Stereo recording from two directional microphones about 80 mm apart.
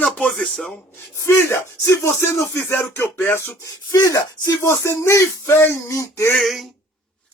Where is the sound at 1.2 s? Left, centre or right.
Left.